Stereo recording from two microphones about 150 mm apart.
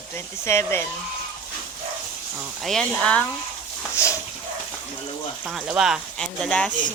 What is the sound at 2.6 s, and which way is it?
Speech, 5° left (ahead or behind).